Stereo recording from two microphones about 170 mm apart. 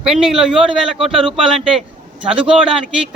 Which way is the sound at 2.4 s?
5° right (ahead or behind).